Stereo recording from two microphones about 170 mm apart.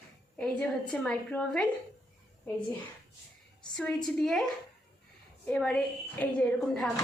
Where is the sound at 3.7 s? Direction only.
5° left (ahead or behind).